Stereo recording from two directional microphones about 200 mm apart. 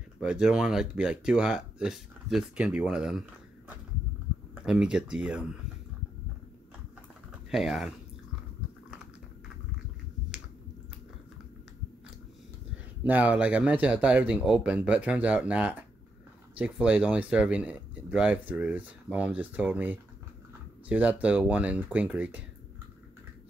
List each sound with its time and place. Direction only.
0.2 s speech: 5° right (ahead or behind)
7.5 s speech: centre (ahead or behind)
13.0 s speech: 10° right (ahead or behind)